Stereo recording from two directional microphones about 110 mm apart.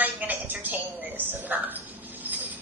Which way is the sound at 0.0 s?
15° right (ahead or behind).